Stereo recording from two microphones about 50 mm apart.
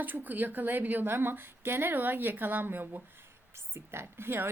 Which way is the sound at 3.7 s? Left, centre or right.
Right.